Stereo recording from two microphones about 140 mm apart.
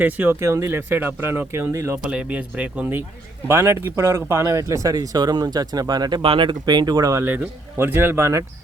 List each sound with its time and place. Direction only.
0.0 s speech: 15° right (ahead or behind)
2.0 s speech: 5° right (ahead or behind)